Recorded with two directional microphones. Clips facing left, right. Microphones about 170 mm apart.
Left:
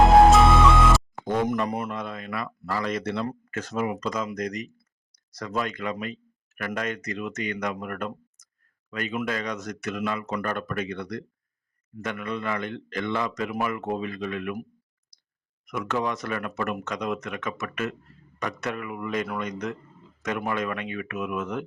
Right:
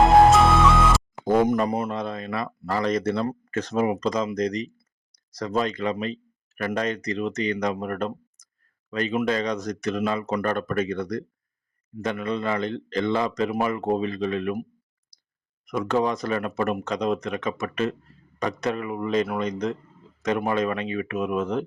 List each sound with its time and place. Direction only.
0.0 s flute: centre (ahead or behind)
1.2 s speech: 35° right (ahead or behind)
11.9 s speech: 30° right (ahead or behind)